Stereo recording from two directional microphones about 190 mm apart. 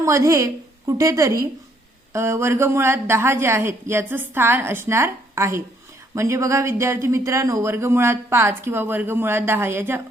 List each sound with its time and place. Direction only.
0.0 s a woman's voice: 15° right (ahead or behind)